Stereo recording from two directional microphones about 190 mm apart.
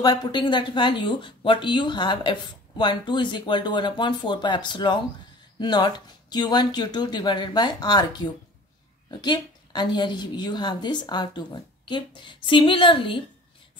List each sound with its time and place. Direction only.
0.0 s a woman's voice: 20° left (ahead or behind)
9.2 s a woman's voice: 25° left (ahead or behind)